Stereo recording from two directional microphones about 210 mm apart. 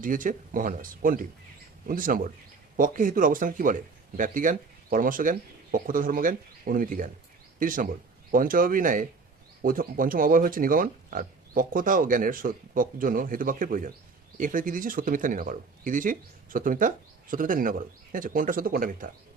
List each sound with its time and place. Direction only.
0.0 s speech: 40° right (ahead or behind)